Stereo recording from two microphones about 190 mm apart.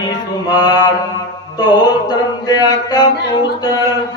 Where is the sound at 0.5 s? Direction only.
20° left (ahead or behind).